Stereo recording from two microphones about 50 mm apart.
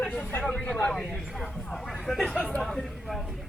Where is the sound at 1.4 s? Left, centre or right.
Centre.